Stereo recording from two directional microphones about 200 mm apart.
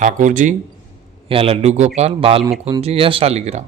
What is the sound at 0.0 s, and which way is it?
Speech, 40° right (ahead or behind).